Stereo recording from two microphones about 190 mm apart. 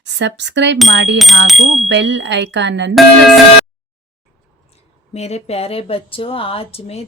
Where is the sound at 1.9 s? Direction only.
70° right (ahead or behind).